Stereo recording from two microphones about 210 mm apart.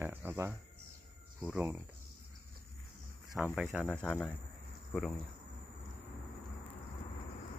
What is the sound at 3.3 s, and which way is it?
Speech, 5° right (ahead or behind).